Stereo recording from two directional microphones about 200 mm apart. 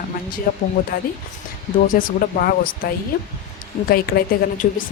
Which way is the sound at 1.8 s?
45° left (ahead or behind).